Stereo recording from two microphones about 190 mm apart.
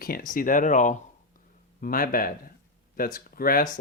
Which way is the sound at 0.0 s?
50° left (ahead or behind).